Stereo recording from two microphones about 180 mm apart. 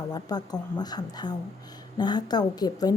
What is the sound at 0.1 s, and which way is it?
A woman's voice, 20° left (ahead or behind).